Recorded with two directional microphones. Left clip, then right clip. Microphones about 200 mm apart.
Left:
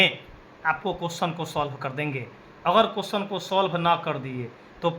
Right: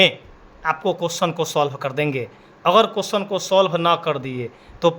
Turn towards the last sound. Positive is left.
turn(degrees=-60)  # may be behind; listen again after turning